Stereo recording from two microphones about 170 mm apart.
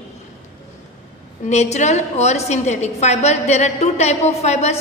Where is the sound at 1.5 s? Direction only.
40° left (ahead or behind).